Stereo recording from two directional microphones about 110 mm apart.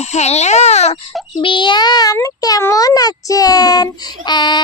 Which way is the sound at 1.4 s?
50° left (ahead or behind).